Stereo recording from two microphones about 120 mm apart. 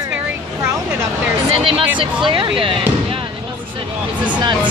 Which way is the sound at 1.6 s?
50° right (ahead or behind).